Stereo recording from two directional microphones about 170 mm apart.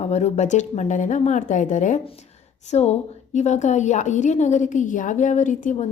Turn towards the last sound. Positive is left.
turn(degrees=45)  # may be behind; listen again after turning